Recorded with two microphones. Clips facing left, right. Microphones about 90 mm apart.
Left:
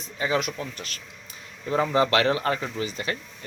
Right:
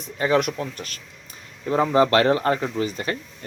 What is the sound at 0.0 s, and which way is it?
Speech, 50° right (ahead or behind).